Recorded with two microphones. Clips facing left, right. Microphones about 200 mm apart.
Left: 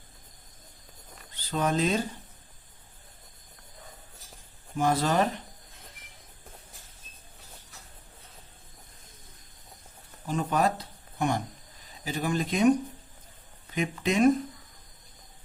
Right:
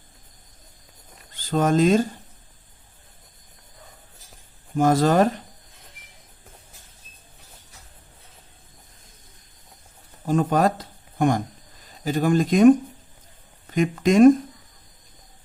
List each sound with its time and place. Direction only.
1.3 s speech: 50° right (ahead or behind)
4.7 s speech: 45° right (ahead or behind)
10.2 s speech: 50° right (ahead or behind)